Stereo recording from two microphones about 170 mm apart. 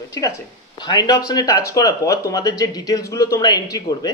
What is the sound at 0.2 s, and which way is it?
Speech, 20° left (ahead or behind).